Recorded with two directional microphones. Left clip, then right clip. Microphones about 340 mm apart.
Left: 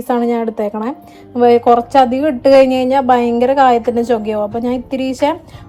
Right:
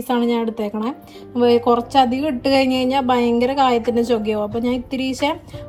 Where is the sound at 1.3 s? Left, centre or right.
Centre.